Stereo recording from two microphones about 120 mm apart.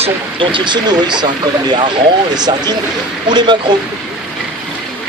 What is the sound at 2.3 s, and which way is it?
Speech, 35° right (ahead or behind).